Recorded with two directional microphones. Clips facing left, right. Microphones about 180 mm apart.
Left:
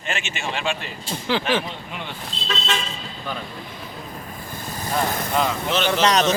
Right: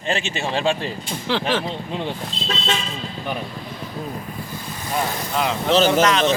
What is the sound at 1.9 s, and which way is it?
Speech, 30° right (ahead or behind).